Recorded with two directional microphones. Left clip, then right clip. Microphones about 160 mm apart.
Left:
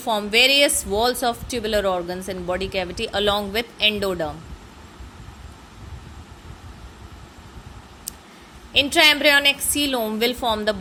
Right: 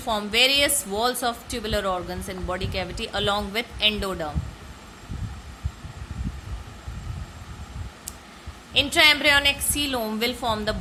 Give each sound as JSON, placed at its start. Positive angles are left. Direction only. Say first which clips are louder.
{"t": 0.0, "sound": "a woman's voice", "louder": "left 3 dB", "side_deg": 20}
{"t": 8.7, "sound": "a woman's voice", "louder": "left 2 dB", "side_deg": 20}